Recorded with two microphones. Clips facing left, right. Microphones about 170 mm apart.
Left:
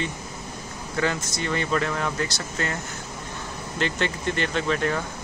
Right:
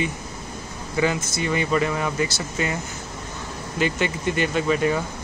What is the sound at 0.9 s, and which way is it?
Speech, 5° right (ahead or behind).